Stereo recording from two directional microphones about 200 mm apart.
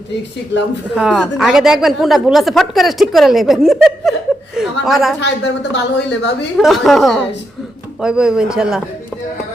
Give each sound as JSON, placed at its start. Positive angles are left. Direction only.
{"t": 0.5, "sound": "a woman's voice", "side_deg": 60}
{"t": 0.9, "sound": "speech", "side_deg": -5}
{"t": 5.2, "sound": "a woman's voice", "side_deg": 60}
{"t": 6.6, "sound": "speech", "side_deg": 0}